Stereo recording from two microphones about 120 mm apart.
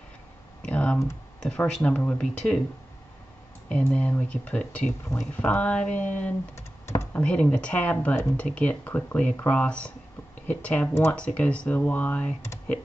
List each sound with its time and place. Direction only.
0.6 s speech: 10° left (ahead or behind)
3.6 s speech: 10° left (ahead or behind)
6.5 s computer keyboard: 25° left (ahead or behind)
7.2 s speech: 10° left (ahead or behind)